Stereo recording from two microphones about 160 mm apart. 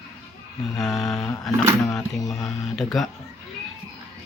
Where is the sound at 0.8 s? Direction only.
Centre (ahead or behind).